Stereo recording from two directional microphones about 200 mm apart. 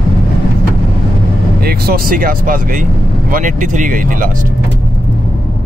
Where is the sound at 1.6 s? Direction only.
50° right (ahead or behind).